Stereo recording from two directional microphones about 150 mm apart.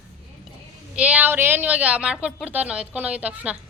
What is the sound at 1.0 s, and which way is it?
A woman's voice, 10° right (ahead or behind).